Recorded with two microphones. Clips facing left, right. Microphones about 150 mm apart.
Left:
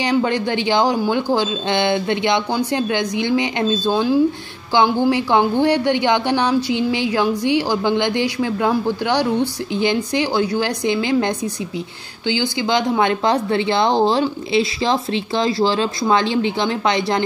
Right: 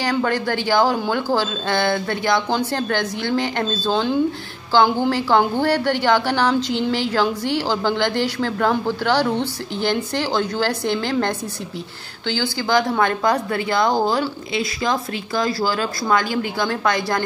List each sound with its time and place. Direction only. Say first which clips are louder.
0.0 s a woman's voice: left 2 dB; 20° left (ahead or behind)